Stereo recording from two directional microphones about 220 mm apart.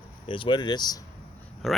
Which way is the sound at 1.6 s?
Centre (ahead or behind).